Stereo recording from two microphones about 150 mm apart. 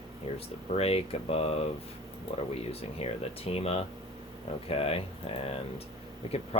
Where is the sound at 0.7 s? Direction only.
40° left (ahead or behind).